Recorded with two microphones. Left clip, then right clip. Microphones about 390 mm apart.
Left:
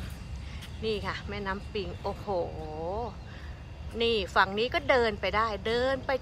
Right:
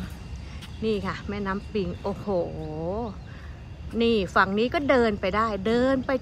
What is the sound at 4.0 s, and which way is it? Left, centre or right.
A woman's voice, centre.